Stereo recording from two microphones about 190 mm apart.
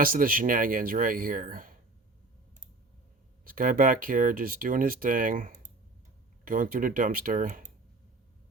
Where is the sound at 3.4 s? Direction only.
45° right (ahead or behind).